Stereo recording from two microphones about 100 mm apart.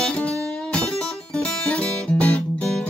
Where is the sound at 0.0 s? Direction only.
10° left (ahead or behind).